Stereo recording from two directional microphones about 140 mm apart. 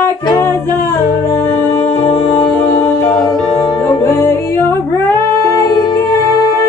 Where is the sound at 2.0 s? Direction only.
45° left (ahead or behind).